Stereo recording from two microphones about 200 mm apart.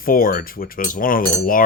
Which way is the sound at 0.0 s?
45° left (ahead or behind).